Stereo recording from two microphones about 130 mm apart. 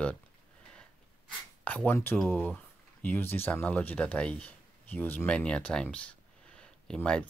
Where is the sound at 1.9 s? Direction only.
15° left (ahead or behind).